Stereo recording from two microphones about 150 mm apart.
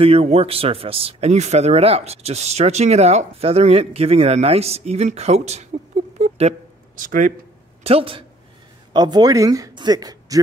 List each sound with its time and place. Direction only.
0.0 s a man's voice: 45° right (ahead or behind)
6.1 s a sound: 45° right (ahead or behind)
7.0 s speech: 60° right (ahead or behind)
7.8 s speech: 40° right (ahead or behind)